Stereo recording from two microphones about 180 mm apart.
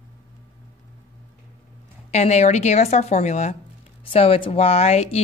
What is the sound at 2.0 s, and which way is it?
A woman's voice, 35° left (ahead or behind).